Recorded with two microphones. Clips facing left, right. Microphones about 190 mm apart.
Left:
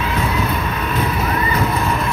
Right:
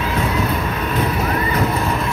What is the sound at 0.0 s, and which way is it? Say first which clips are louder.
Boat: even; 40° right (ahead or behind).